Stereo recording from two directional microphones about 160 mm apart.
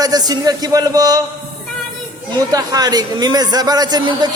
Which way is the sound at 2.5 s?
25° right (ahead or behind).